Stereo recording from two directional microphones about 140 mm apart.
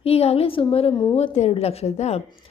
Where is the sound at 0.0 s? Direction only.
45° left (ahead or behind).